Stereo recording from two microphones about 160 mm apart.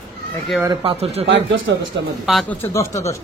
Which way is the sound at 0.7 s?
35° right (ahead or behind).